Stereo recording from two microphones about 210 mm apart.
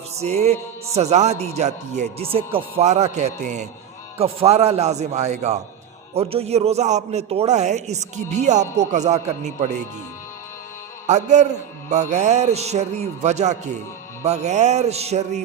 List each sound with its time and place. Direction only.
0.2 s a man's voice: 30° right (ahead or behind)
11.0 s a man's voice: 35° right (ahead or behind)